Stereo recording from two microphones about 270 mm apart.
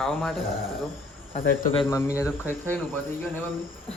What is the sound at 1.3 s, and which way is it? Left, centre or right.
Speech, left.